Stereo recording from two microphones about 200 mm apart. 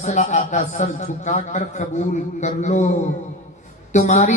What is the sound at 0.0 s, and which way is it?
A man's voice, 35° left (ahead or behind).